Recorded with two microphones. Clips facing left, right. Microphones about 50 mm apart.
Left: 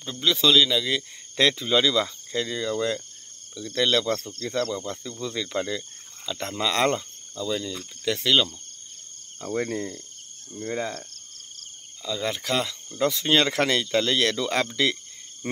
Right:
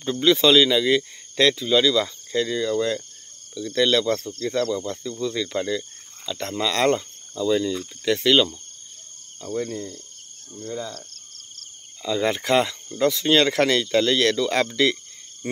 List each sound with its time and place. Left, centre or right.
0.0 s speech: centre
1.3 s speech: centre
6.9 s speech: centre
9.4 s speech: left
12.0 s speech: centre
13.0 s speech: centre
15.4 s frog: centre